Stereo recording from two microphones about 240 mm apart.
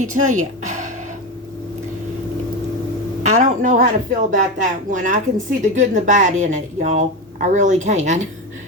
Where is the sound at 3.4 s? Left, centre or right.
Right.